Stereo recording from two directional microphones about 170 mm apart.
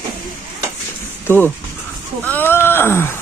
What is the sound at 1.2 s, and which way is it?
Speech, 10° left (ahead or behind).